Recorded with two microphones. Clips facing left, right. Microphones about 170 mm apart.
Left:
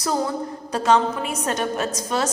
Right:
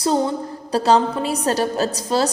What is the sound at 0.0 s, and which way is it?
A man's voice, 25° right (ahead or behind).